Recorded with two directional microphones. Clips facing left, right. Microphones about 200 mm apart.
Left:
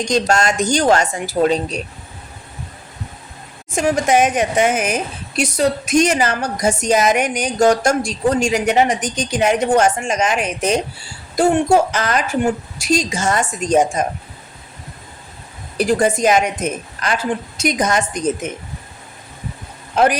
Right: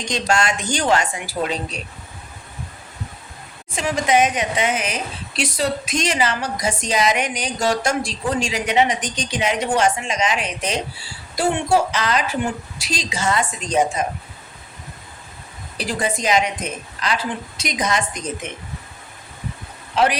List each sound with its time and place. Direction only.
0.1 s a woman's voice: 40° left (ahead or behind)
3.7 s a woman's voice: 45° left (ahead or behind)
15.8 s a woman's voice: 45° left (ahead or behind)